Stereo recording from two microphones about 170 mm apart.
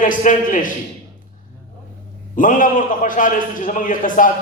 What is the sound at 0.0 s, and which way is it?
Speech, 50° left (ahead or behind).